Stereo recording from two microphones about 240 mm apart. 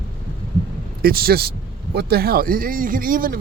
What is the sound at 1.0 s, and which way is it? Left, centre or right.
Speech, right.